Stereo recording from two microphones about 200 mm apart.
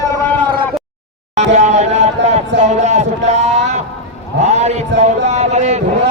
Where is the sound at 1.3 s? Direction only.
35° right (ahead or behind).